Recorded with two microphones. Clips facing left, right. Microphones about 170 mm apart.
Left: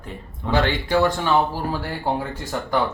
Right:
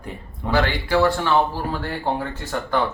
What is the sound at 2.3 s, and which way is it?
Speech, 15° left (ahead or behind).